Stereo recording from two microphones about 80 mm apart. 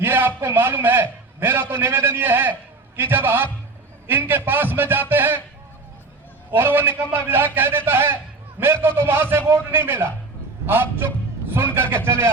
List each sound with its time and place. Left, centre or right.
0.0 s a man's voice: right
6.5 s a man's voice: right